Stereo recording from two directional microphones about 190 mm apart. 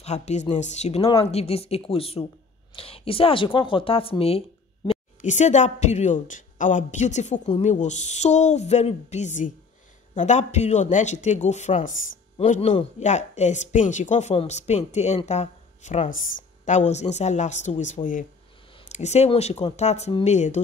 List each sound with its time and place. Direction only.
0.0 s speech: 35° left (ahead or behind)